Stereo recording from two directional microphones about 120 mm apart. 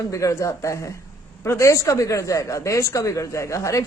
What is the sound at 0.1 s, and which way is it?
A man's voice, 25° left (ahead or behind).